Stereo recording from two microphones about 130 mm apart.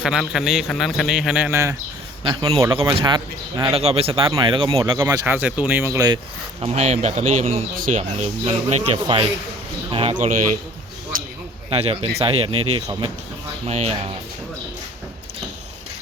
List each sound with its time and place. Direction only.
0.0 s a man's voice: 5° right (ahead or behind)
1.5 s speech: 20° right (ahead or behind)
2.2 s speech: 40° right (ahead or behind)
4.3 s speech: 35° right (ahead or behind)
4.9 s speech: 20° right (ahead or behind)
6.6 s speech: 55° right (ahead or behind); by 7.9 s 90° right
8.4 s speech: 50° right (ahead or behind)
10.2 s a man's voice: 65° right (ahead or behind)
11.7 s speech: 50° right (ahead or behind)